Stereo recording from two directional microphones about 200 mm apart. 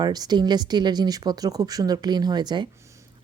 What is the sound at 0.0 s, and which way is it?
Speech, 20° right (ahead or behind).